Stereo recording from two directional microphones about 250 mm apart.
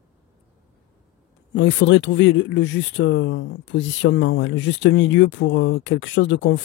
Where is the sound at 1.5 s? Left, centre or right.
Left.